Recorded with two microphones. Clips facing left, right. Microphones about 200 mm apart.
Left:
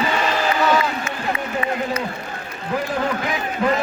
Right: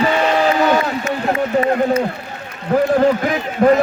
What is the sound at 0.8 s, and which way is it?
A man's voice, 45° right (ahead or behind).